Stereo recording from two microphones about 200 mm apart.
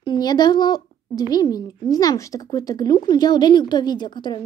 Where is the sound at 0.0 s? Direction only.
20° left (ahead or behind).